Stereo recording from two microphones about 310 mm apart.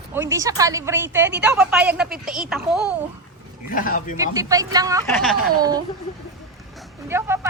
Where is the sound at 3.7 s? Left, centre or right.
Left.